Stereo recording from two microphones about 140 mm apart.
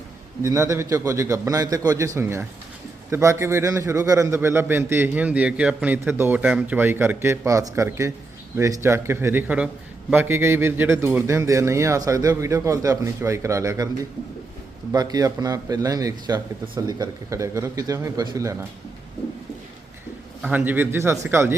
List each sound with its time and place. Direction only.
0.4 s a man's voice: 20° right (ahead or behind)
14.9 s a man's voice: 25° right (ahead or behind)
20.4 s a man's voice: 10° right (ahead or behind)